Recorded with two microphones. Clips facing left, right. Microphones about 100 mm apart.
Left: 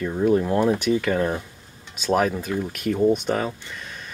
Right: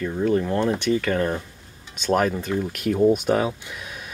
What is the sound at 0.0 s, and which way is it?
Speech, 10° left (ahead or behind).